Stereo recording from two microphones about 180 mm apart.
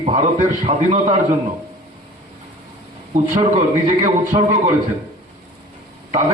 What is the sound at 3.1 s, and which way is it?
A man's voice, 35° right (ahead or behind).